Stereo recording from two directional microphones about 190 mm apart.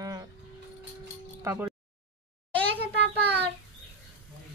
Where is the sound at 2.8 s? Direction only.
60° right (ahead or behind).